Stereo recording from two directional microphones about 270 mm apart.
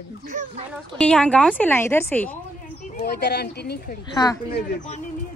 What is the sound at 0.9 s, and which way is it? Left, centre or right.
Speech, centre.